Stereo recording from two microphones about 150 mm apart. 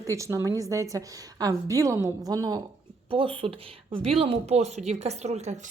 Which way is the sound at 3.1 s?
35° right (ahead or behind).